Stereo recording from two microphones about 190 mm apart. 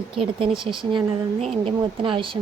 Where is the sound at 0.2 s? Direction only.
30° right (ahead or behind).